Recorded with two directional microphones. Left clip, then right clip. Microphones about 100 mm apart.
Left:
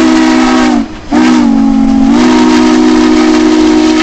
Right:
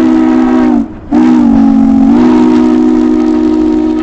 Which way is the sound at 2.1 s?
35° left (ahead or behind).